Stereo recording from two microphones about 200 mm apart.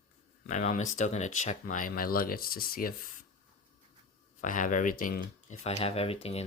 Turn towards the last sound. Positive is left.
turn(degrees=30)  # may be behind; listen again after turning